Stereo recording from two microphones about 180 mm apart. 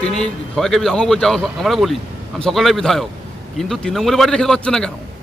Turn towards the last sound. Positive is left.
turn(degrees=5)  # may be behind; listen again after turning